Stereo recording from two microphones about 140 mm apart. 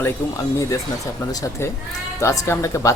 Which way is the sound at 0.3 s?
25° left (ahead or behind).